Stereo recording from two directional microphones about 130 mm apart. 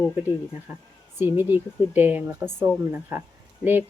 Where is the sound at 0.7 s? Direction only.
15° right (ahead or behind).